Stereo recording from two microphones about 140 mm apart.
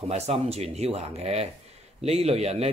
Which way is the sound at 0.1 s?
45° right (ahead or behind).